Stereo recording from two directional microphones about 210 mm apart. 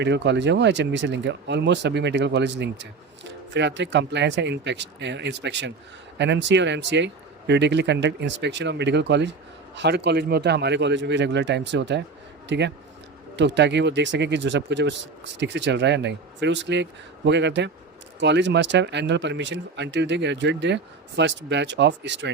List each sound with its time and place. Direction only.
0.0 s speech: 55° right (ahead or behind)